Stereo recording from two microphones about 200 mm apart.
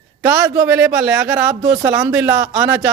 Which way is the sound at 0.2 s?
10° right (ahead or behind).